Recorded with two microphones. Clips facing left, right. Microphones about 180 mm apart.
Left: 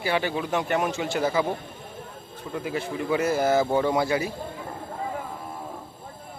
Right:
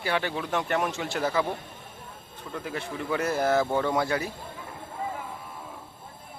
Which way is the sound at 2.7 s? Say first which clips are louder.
Left 4 dB; 5° left (ahead or behind).